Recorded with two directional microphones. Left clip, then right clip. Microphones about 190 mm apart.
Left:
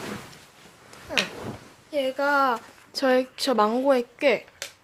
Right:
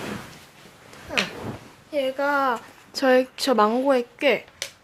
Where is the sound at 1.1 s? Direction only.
10° left (ahead or behind).